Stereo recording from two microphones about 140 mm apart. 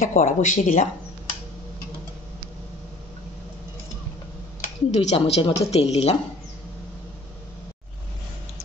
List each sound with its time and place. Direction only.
0.0 s speech: 65° left (ahead or behind)
4.6 s speech: 55° left (ahead or behind)